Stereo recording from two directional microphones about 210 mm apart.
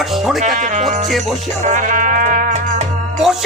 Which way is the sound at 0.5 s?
35° right (ahead or behind).